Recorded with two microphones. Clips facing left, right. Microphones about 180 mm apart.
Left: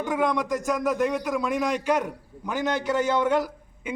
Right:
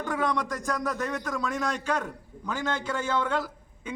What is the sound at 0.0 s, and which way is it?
A man's voice, 15° left (ahead or behind).